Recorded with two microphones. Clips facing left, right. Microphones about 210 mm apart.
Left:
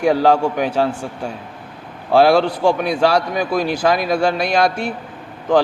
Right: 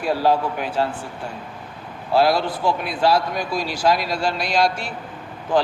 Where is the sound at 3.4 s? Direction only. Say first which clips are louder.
Left 4 dB; 55° left (ahead or behind).